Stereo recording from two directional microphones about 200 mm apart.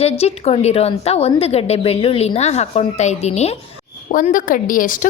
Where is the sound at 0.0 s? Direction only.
30° left (ahead or behind).